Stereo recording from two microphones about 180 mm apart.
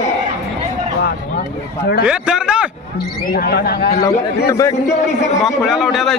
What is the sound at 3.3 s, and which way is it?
Speech, 60° left (ahead or behind).